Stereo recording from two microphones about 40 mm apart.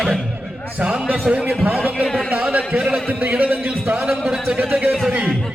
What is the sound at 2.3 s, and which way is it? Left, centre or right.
A man's voice, right.